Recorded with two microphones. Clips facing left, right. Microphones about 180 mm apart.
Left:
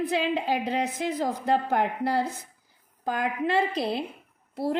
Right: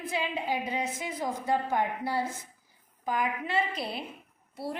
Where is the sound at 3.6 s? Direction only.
70° left (ahead or behind).